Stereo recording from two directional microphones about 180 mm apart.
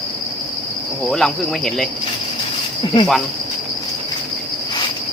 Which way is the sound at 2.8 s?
25° left (ahead or behind).